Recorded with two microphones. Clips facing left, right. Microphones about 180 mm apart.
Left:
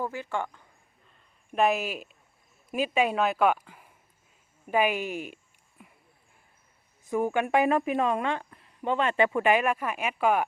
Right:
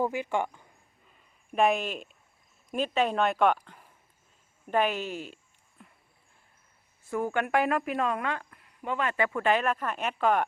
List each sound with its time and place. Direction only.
0.0 s speech: 15° right (ahead or behind)
1.5 s speech: centre (ahead or behind)
4.6 s a sound: 10° left (ahead or behind)
7.1 s a woman's voice: 15° left (ahead or behind)